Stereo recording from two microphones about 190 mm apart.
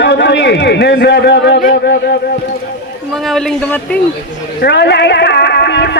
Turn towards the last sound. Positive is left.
turn(degrees=65)  # may be behind; listen again after turning